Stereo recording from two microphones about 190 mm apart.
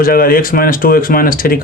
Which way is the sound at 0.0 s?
50° left (ahead or behind).